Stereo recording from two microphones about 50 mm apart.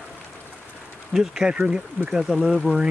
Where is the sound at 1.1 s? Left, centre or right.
Centre.